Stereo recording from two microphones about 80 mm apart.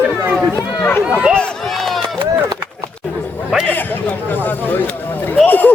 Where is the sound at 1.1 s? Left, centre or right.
Centre.